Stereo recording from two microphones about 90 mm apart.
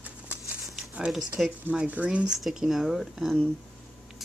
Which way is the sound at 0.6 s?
Centre (ahead or behind).